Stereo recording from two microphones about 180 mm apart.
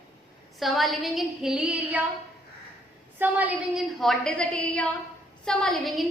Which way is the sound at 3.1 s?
10° right (ahead or behind).